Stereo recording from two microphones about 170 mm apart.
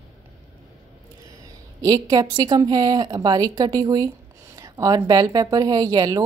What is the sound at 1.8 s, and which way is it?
A woman's voice, 20° right (ahead or behind).